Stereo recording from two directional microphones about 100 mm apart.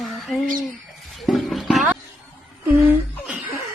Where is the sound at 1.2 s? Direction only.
Centre (ahead or behind).